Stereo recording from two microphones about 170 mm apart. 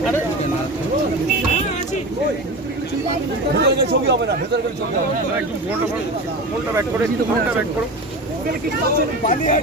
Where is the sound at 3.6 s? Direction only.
75° right (ahead or behind).